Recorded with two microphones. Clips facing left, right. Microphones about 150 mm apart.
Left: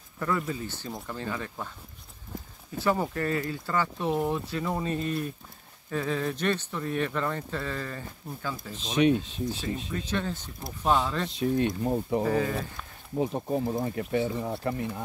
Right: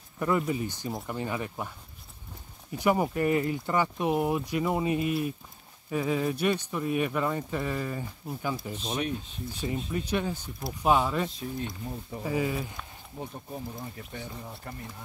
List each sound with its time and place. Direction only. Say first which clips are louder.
0.2 s speech: right 3 dB; 20° right (ahead or behind)
2.8 s speech: right 2 dB; 15° right (ahead or behind)
8.9 s speech: left 10 dB; 90° left
9.9 s speech: right 3 dB; 10° right (ahead or behind)
11.2 s speech: left 9 dB; 75° left (ahead or behind)
12.3 s speech: left 2 dB; 10° right (ahead or behind)
13.2 s speech: left 11 dB; 90° left